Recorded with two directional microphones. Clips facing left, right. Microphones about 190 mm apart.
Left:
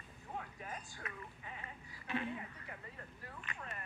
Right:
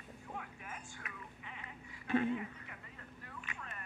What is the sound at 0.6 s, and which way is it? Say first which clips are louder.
Speech: left 2 dB; 35° left (ahead or behind).